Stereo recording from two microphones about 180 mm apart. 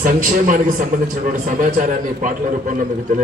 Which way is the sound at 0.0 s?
50° right (ahead or behind).